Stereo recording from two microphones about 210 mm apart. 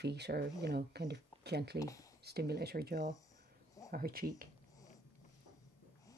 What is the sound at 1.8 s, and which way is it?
Speech, 15° left (ahead or behind).